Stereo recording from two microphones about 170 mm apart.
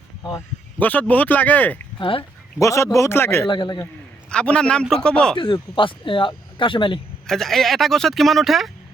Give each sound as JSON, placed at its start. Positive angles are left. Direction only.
{"t": 0.3, "sound": "speech", "side_deg": 15}
{"t": 2.0, "sound": "speech", "side_deg": 30}
{"t": 2.6, "sound": "speech", "side_deg": 15}
{"t": 3.5, "sound": "speech", "side_deg": 25}
{"t": 4.3, "sound": "speech", "side_deg": 5}
{"t": 5.4, "sound": "speech", "side_deg": 30}
{"t": 7.3, "sound": "speech", "side_deg": 0}